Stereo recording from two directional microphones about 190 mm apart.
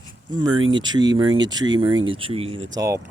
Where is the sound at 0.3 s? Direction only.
25° right (ahead or behind).